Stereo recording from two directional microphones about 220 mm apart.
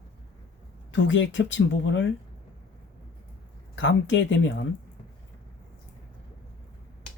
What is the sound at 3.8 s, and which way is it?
Speech, 55° left (ahead or behind).